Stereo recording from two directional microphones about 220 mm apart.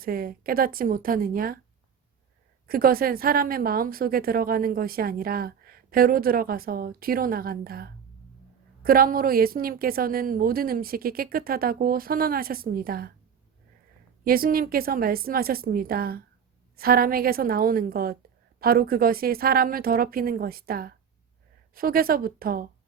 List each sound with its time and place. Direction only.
0.0 s a woman's voice: 40° right (ahead or behind)
2.6 s a woman's voice: 40° right (ahead or behind)
14.3 s a woman's voice: 40° right (ahead or behind)